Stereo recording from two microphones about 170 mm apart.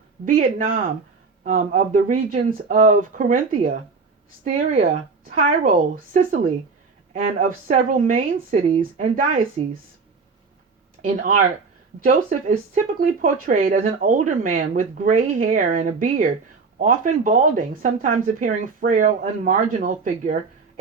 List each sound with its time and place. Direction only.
0.3 s speech: 55° right (ahead or behind)
4.4 s speech: 40° right (ahead or behind)
6.1 s speech: 55° right (ahead or behind)
11.0 s speech: 50° right (ahead or behind)